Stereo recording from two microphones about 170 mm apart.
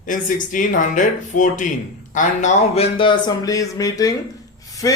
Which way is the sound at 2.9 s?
30° left (ahead or behind).